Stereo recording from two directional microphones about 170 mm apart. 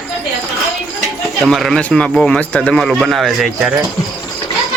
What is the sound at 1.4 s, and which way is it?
A man's voice, centre (ahead or behind).